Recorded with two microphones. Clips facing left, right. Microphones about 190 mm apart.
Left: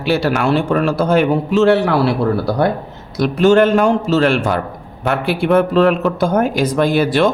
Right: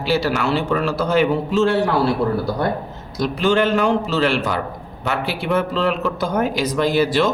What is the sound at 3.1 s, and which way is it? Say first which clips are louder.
A man's voice: left 6 dB; 55° left (ahead or behind).